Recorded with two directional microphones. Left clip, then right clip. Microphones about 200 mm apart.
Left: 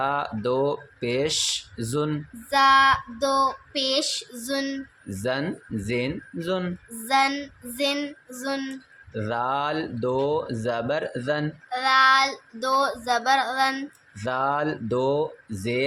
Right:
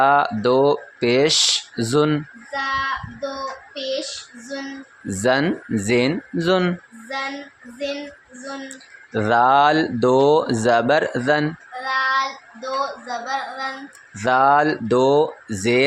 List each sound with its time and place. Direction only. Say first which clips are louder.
0.0 s speech: right 10 dB; 20° right (ahead or behind)
2.5 s speech: left 6 dB; 40° left (ahead or behind)
5.2 s speech: right 9 dB; 20° right (ahead or behind)
7.1 s speech: left 6 dB; 40° left (ahead or behind)
8.7 s speech: right 9 dB; 20° right (ahead or behind)
11.7 s speech: left 3 dB; 40° left (ahead or behind)
14.2 s speech: right 10 dB; 20° right (ahead or behind)